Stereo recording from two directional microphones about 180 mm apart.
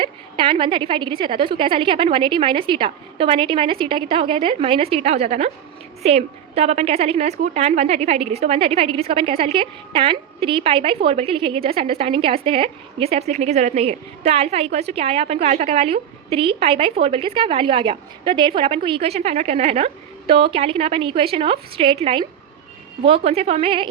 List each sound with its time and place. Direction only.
0.0 s a woman's voice: 30° right (ahead or behind)